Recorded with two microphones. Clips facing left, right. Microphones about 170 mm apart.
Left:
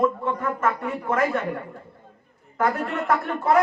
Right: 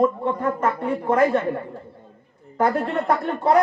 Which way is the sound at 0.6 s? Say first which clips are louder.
Right 2 dB; 30° right (ahead or behind).